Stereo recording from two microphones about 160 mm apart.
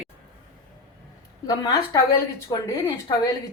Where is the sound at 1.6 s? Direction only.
25° left (ahead or behind).